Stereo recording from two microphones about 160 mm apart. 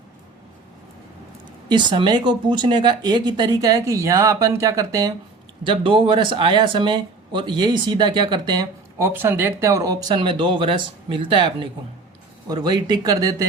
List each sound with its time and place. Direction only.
1.7 s speech: 30° right (ahead or behind)
5.6 s speech: 30° right (ahead or behind)
9.0 s speech: 15° right (ahead or behind)